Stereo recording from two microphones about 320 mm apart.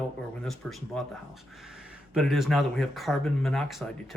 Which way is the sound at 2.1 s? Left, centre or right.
Centre.